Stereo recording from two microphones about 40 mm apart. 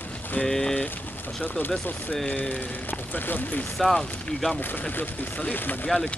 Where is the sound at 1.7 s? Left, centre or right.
Left.